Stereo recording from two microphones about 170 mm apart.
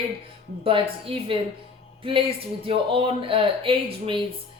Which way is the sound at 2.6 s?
30° right (ahead or behind).